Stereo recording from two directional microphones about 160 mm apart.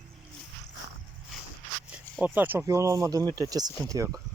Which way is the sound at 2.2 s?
10° right (ahead or behind).